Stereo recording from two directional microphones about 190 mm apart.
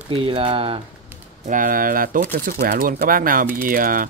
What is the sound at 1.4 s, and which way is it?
Speech, 45° right (ahead or behind).